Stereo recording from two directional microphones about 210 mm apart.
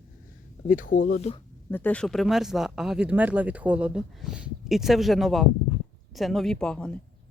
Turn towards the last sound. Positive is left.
turn(degrees=5)  # may be behind; listen again after turning